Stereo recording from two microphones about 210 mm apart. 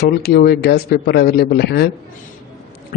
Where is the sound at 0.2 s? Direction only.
50° left (ahead or behind).